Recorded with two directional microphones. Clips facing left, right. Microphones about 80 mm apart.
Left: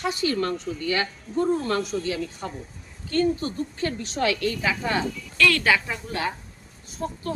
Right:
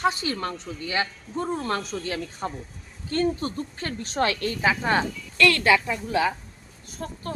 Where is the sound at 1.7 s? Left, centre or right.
Right.